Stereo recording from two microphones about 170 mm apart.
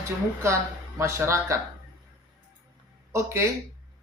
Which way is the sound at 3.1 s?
15° right (ahead or behind).